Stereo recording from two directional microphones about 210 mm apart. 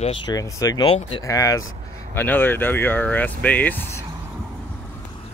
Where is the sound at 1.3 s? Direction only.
15° left (ahead or behind).